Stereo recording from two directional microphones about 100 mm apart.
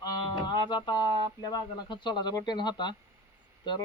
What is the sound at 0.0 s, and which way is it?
Speech, 45° left (ahead or behind).